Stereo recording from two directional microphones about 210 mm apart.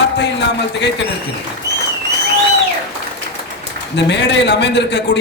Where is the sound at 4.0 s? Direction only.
55° left (ahead or behind).